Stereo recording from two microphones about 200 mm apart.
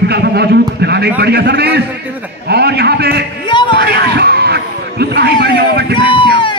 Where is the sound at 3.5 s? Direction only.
25° left (ahead or behind).